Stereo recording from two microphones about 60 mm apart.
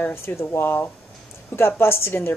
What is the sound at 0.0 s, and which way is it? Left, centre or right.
Speech, left.